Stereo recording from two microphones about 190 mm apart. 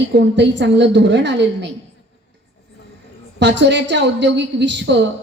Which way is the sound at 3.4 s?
65° right (ahead or behind).